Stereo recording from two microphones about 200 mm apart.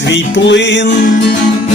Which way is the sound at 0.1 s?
60° left (ahead or behind).